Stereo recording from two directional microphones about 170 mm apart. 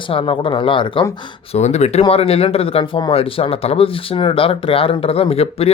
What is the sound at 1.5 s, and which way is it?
Speech, 40° left (ahead or behind).